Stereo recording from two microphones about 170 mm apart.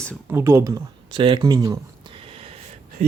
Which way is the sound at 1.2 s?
30° right (ahead or behind).